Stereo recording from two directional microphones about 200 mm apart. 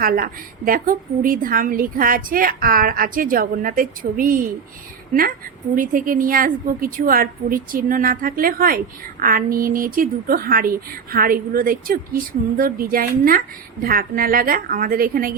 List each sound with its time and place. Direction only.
0.0 s a woman's voice: 45° right (ahead or behind)
5.7 s a woman's voice: 40° right (ahead or behind)